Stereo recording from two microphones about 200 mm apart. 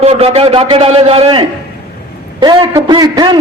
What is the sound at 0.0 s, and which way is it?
A man's voice, 30° right (ahead or behind).